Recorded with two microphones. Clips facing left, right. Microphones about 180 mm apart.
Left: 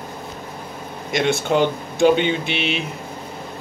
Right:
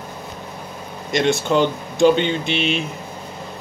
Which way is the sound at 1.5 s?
50° left (ahead or behind).